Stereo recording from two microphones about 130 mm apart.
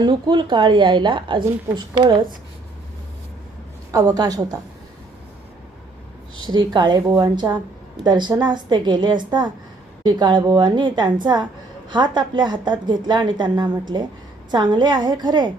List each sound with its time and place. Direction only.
0.0 s a woman's voice: 35° right (ahead or behind)
3.9 s a woman's voice: 30° right (ahead or behind)
6.5 s a woman's voice: 35° right (ahead or behind)